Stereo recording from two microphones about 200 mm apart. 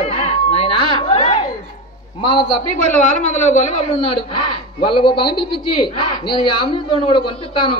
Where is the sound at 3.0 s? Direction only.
35° left (ahead or behind).